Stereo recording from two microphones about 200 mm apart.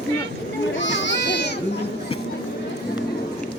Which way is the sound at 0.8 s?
65° left (ahead or behind).